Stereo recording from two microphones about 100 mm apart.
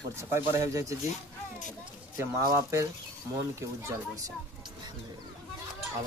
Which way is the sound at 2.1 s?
30° right (ahead or behind).